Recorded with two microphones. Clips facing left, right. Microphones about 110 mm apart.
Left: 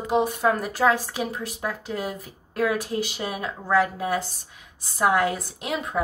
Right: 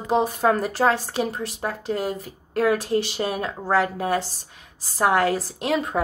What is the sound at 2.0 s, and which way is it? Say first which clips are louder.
A woman's voice: right 4 dB; 30° right (ahead or behind).